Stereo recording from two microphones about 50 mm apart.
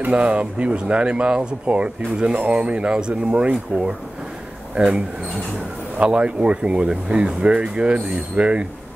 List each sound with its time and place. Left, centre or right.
0.1 s speech: right